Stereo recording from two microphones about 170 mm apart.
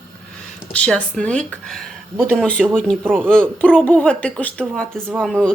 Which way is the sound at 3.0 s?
10° right (ahead or behind).